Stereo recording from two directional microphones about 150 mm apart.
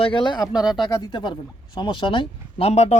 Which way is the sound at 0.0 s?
35° left (ahead or behind).